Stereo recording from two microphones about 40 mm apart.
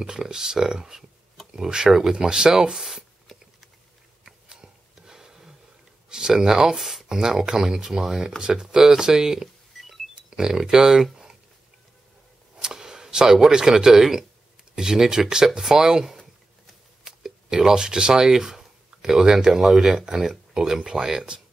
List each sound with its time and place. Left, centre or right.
0.0 s speech: centre
2.1 s speech: right
2.7 s a sound: centre
4.2 s a sound: centre
6.0 s speech: centre
6.8 s speech: centre
7.1 s speech: centre
9.8 s a sound: centre
10.4 s speech: centre
12.5 s speech: centre